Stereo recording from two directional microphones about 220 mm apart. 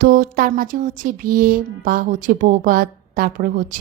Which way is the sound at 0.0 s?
40° right (ahead or behind).